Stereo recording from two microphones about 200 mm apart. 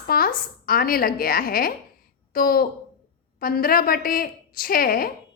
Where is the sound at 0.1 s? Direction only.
45° left (ahead or behind).